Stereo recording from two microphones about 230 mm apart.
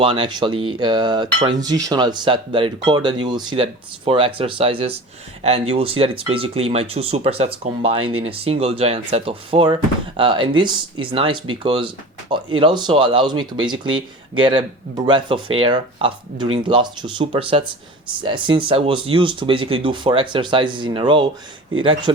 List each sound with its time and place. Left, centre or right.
0.0 s speech: right